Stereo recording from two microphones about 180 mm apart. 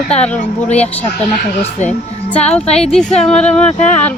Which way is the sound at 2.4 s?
35° left (ahead or behind).